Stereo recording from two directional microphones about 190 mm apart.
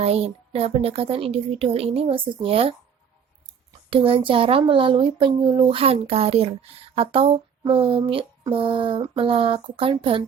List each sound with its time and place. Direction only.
0.0 s a woman's voice: 30° right (ahead or behind)
3.8 s speech: 30° right (ahead or behind)